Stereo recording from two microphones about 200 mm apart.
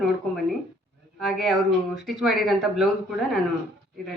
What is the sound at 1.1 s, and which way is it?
Speech, centre (ahead or behind).